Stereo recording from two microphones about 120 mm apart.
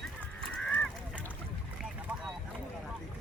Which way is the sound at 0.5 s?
10° left (ahead or behind).